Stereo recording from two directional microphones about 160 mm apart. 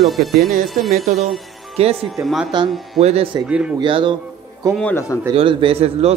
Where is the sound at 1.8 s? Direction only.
40° right (ahead or behind).